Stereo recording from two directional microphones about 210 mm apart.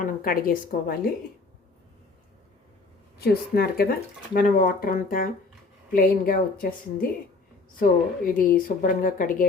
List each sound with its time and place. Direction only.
0.0 s a woman's voice: 45° left (ahead or behind)
3.2 s a woman's voice: 45° left (ahead or behind)